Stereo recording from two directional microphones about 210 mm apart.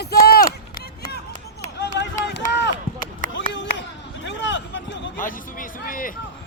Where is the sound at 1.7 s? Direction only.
55° left (ahead or behind).